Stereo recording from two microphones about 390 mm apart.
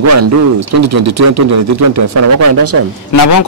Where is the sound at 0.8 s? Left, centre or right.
Right.